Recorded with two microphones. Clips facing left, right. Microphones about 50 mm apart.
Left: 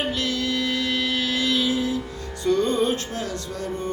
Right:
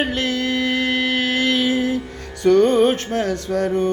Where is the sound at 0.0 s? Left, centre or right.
Right.